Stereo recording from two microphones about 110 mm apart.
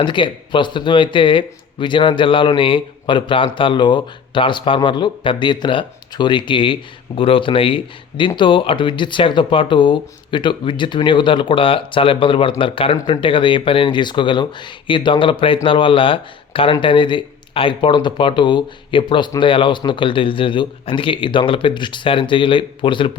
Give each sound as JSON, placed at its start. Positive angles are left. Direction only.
{"t": 0.0, "sound": "speech", "side_deg": 45}